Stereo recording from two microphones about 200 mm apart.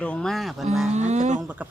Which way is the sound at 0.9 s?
35° right (ahead or behind).